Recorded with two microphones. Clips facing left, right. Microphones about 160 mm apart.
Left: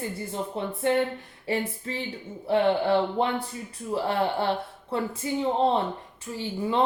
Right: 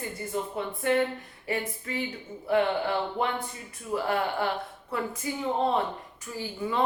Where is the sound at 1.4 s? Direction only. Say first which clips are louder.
Left 3 dB; 30° left (ahead or behind).